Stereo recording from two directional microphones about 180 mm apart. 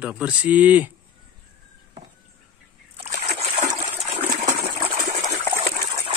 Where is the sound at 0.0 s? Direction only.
5° right (ahead or behind).